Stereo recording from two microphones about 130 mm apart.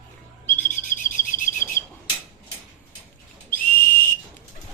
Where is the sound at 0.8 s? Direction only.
90° left.